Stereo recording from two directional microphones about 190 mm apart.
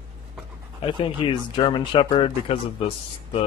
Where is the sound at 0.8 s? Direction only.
25° left (ahead or behind).